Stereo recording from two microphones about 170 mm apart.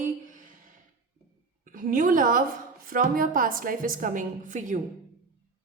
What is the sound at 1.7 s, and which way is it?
A woman's voice, 50° right (ahead or behind).